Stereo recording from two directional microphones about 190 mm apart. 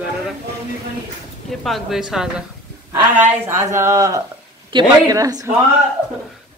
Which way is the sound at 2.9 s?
15° right (ahead or behind).